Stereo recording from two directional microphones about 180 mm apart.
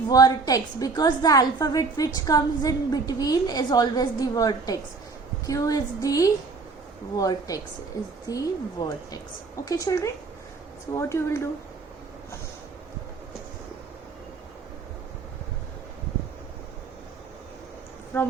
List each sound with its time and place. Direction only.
0.1 s a woman's voice: 20° left (ahead or behind)
18.1 s a woman's voice: 10° left (ahead or behind)